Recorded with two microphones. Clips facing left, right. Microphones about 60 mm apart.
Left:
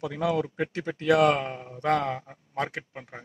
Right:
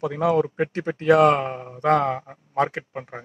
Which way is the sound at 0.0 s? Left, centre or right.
Right.